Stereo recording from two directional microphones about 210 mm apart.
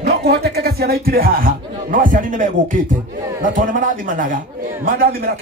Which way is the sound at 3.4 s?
40° right (ahead or behind).